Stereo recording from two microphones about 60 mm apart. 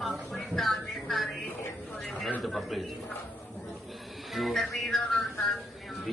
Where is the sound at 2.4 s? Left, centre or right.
Centre.